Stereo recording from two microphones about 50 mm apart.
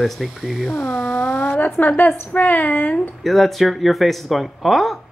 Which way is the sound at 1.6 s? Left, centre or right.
Left.